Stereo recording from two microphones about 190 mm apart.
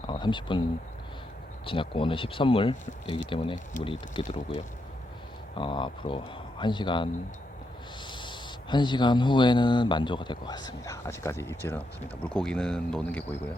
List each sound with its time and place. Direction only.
0.1 s speech: 25° left (ahead or behind)
1.6 s speech: 25° left (ahead or behind)
3.8 s speech: 45° left (ahead or behind)
4.1 s speech: 25° left (ahead or behind); by 13.4 s 10° left (ahead or behind)